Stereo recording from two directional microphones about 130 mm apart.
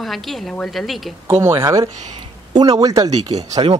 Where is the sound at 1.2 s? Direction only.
20° right (ahead or behind).